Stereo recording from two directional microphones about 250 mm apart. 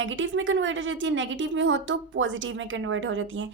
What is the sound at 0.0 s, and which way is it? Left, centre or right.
A woman's voice, right.